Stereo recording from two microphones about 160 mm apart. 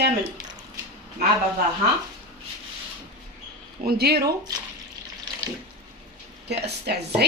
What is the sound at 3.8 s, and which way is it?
Speech, 85° right.